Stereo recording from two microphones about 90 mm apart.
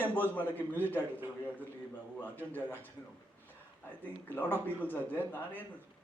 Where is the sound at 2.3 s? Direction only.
20° left (ahead or behind).